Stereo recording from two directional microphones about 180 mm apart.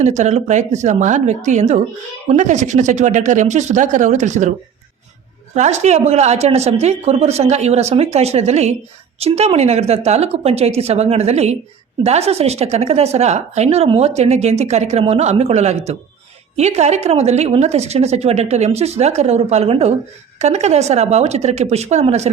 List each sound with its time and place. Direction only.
0.0 s speech: 40° right (ahead or behind)
5.5 s speech: 40° right (ahead or behind)